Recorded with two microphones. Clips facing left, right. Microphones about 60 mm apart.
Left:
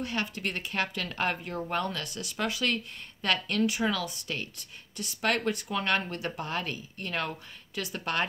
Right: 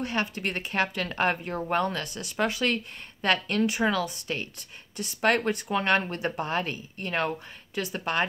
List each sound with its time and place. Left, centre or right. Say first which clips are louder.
0.0 s speech: right 3 dB; right
8.0 s speech: right 3 dB; centre